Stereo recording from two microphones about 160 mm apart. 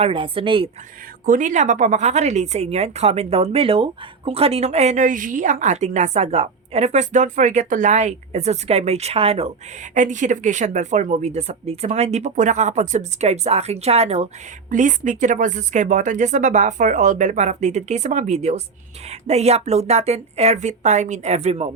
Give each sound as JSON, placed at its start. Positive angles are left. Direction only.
{"t": 0.0, "sound": "speech", "side_deg": -35}
{"t": 1.2, "sound": "a woman's voice", "side_deg": -55}
{"t": 9.9, "sound": "a woman's voice", "side_deg": -50}
{"t": 14.7, "sound": "a woman's voice", "side_deg": -50}